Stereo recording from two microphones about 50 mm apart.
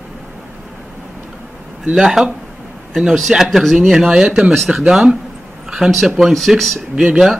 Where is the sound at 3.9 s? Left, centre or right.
Centre.